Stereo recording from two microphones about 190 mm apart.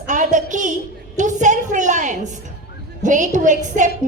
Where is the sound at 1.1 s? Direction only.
40° right (ahead or behind).